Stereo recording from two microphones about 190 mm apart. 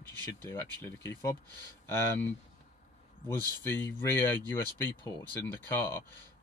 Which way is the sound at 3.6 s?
10° left (ahead or behind).